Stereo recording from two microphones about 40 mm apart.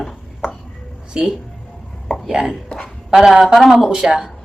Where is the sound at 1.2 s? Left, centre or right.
Centre.